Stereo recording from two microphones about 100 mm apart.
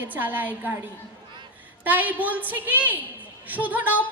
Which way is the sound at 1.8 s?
15° right (ahead or behind).